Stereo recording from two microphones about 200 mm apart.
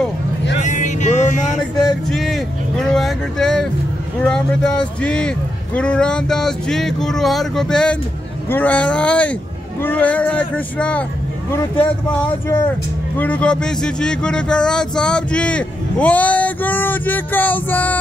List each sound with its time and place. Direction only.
0.6 s music: 35° left (ahead or behind)
2.0 s a sound: centre (ahead or behind)
2.9 s speech: 5° left (ahead or behind)